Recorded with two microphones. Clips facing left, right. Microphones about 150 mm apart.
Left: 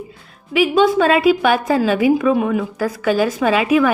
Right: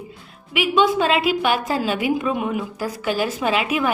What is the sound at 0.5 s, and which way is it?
Speech, 40° left (ahead or behind).